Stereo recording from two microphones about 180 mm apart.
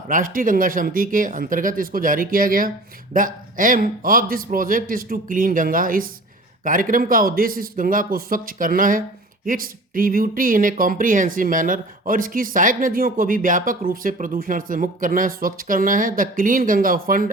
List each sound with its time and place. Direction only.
0.1 s speech: 50° right (ahead or behind)